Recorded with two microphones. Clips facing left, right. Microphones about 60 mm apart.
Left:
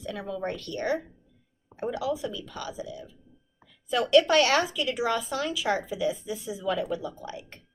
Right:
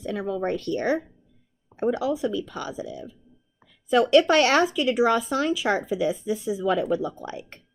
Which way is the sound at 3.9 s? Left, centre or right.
Right.